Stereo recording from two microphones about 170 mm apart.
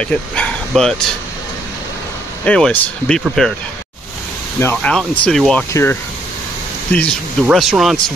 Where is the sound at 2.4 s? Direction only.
5° left (ahead or behind).